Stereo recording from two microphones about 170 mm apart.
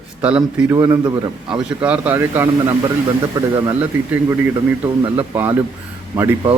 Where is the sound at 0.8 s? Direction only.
20° right (ahead or behind).